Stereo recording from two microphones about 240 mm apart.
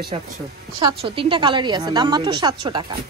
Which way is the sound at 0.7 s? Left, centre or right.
Right.